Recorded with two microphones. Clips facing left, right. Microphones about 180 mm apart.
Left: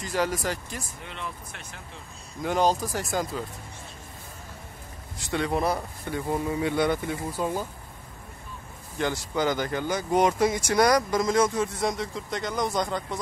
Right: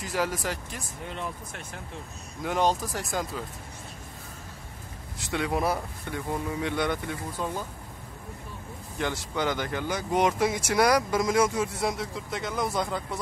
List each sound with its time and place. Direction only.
0.0 s speech: centre (ahead or behind)
1.0 s speech: 45° right (ahead or behind)
2.4 s speech: centre (ahead or behind)
5.3 s speech: 5° right (ahead or behind)
8.9 s speech: centre (ahead or behind)